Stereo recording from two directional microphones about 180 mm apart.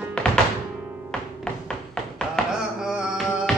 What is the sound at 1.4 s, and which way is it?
Music, 5° left (ahead or behind).